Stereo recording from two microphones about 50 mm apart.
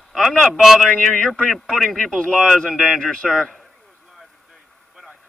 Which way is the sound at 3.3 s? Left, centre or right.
Centre.